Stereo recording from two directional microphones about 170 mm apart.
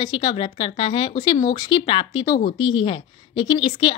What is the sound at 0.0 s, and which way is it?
A woman's voice, 25° left (ahead or behind).